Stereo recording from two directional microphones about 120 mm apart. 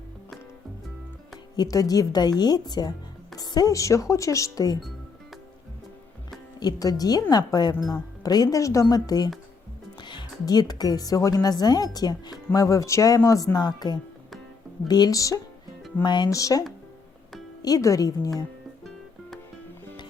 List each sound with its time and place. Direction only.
1.5 s speech: 30° left (ahead or behind)
6.6 s a woman's voice: 30° left (ahead or behind)
16.0 s speech: 40° left (ahead or behind)
16.3 s speech: 30° left (ahead or behind)